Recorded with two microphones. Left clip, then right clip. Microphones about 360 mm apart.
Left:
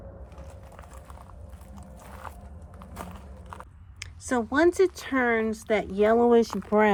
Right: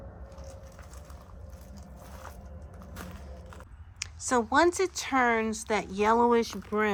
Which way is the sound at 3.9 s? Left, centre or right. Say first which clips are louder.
Right 1 dB; centre.